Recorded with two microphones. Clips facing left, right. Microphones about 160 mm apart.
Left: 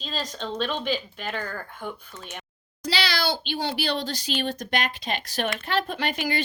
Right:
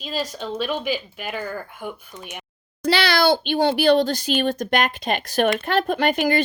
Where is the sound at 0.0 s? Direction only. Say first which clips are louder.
Right 4 dB; 10° right (ahead or behind).